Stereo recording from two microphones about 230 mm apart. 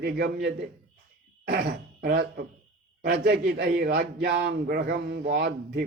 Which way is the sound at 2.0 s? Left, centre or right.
Right.